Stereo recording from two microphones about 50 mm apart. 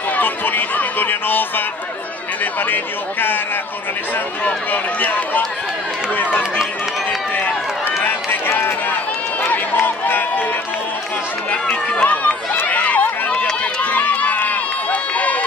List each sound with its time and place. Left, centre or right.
0.1 s speech: left
2.6 s a man's voice: left
9.4 s run: left
11.7 s run: left
13.3 s run: left